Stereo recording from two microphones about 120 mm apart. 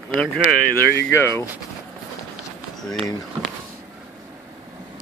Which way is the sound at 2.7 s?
5° left (ahead or behind).